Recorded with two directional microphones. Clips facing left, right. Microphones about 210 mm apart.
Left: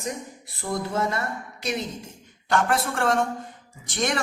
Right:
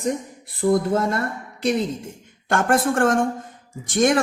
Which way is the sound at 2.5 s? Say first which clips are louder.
Right 4 dB; 50° right (ahead or behind).